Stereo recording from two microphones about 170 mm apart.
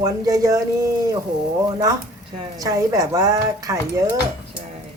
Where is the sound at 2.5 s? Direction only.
20° right (ahead or behind).